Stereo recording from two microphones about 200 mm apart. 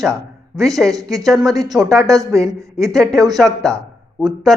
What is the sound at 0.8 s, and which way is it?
Speech, 15° right (ahead or behind).